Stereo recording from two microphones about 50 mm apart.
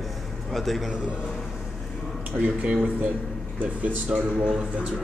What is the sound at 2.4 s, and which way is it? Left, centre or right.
Speech, right.